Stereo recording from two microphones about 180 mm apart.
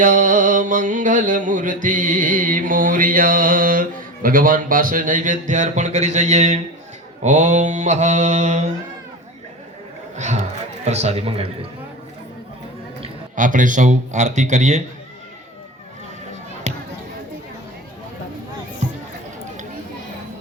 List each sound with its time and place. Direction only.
0.0 s mantra: 45° right (ahead or behind)
10.2 s mantra: 40° right (ahead or behind)
13.3 s mantra: 45° right (ahead or behind)
16.7 s basketball bounce: 40° right (ahead or behind)